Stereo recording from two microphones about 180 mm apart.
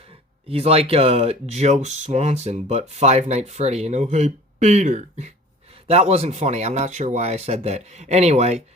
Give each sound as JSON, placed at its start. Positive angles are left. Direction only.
{"t": 0.0, "sound": "speech", "side_deg": -35}